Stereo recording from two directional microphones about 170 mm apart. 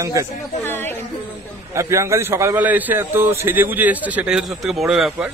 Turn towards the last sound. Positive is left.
turn(degrees=-5)  # may be behind; listen again after turning